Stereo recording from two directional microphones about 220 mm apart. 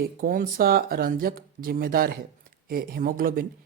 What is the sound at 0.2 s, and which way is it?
Speech, 40° right (ahead or behind).